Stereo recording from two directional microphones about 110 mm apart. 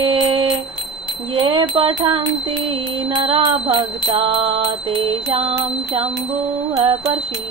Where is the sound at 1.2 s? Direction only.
50° right (ahead or behind).